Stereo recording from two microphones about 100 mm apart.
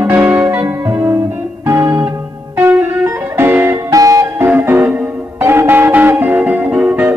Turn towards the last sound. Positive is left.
turn(degrees=-20)  # may be behind; listen again after turning